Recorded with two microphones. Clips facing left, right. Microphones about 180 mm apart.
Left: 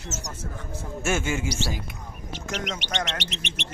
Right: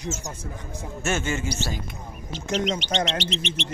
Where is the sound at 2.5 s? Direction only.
25° right (ahead or behind).